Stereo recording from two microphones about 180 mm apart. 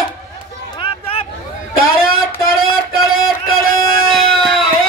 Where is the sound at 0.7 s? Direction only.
30° left (ahead or behind).